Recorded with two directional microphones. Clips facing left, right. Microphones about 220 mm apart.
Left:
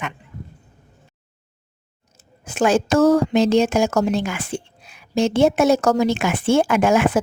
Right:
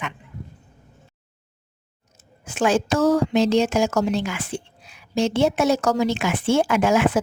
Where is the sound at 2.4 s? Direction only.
40° left (ahead or behind).